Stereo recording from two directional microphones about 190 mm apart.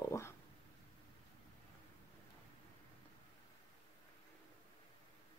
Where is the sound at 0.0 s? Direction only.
15° left (ahead or behind).